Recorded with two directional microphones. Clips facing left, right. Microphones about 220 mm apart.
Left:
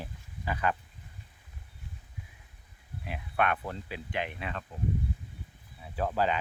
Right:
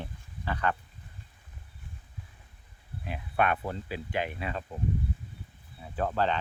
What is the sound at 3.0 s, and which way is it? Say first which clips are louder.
Speech: right 2 dB; centre (ahead or behind).